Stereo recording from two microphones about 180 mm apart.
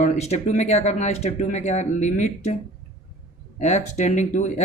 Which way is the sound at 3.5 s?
40° left (ahead or behind).